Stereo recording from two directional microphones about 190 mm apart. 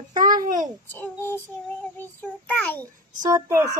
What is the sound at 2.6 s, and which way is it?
Child singing, 10° left (ahead or behind).